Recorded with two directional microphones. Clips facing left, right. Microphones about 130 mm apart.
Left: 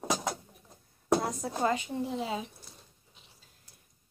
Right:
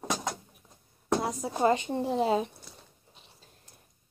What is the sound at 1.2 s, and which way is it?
Child singing, 15° right (ahead or behind).